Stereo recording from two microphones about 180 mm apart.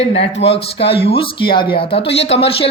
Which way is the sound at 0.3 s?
35° left (ahead or behind).